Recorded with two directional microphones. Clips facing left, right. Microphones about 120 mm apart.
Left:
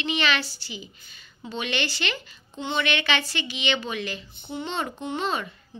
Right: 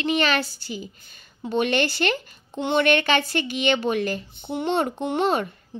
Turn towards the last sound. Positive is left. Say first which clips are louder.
# right 6 dB
turn(degrees=-55)  # may be behind; listen again after turning